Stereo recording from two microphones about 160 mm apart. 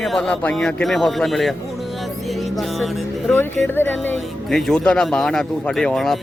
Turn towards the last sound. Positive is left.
turn(degrees=0)  # may be behind; listen again after turning